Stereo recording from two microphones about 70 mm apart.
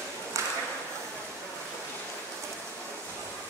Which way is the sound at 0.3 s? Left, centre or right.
Right.